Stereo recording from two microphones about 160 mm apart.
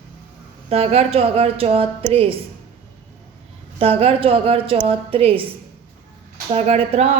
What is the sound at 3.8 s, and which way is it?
A woman's voice, 35° right (ahead or behind).